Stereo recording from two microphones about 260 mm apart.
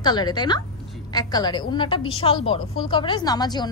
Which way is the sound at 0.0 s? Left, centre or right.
Centre.